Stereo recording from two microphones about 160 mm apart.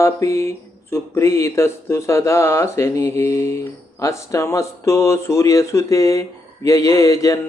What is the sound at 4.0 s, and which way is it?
Mantra, 20° left (ahead or behind).